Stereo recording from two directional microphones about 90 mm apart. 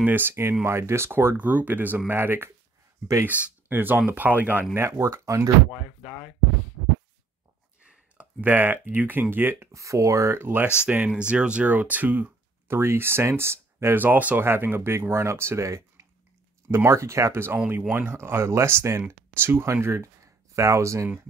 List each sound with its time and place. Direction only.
0.0 s speech: 20° right (ahead or behind)
4.7 s speech: 30° right (ahead or behind)
6.0 s speech: centre (ahead or behind)
8.2 s speech: 20° right (ahead or behind)
9.7 s speech: 35° right (ahead or behind)
10.9 s speech: 15° right (ahead or behind); by 21.1 s 35° right (ahead or behind)